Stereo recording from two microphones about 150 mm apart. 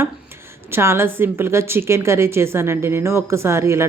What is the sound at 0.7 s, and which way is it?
Speech, 15° right (ahead or behind).